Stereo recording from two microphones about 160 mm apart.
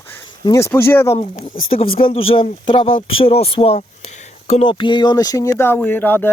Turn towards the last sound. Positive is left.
turn(degrees=10)  # may be behind; listen again after turning